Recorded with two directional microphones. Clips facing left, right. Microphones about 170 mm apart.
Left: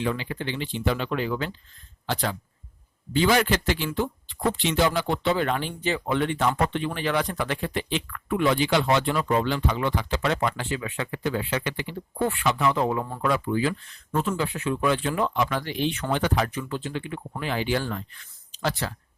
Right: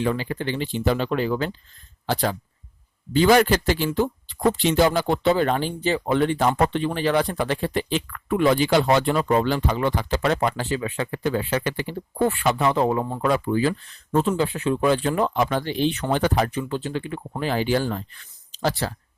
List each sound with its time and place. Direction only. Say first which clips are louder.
0.0 s speech: right 4 dB; 40° right (ahead or behind)
3.1 s speech: right 5 dB; 40° right (ahead or behind)